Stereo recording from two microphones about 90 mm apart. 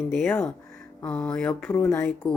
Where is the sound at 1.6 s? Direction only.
25° left (ahead or behind).